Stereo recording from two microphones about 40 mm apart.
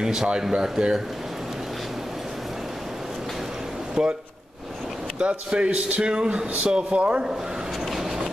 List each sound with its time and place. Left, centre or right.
0.0 s a man's voice: centre
4.0 s a man's voice: right
5.2 s a man's voice: right
7.9 s a sound: centre